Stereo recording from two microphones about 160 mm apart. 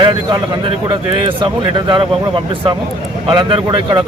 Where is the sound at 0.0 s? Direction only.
30° right (ahead or behind).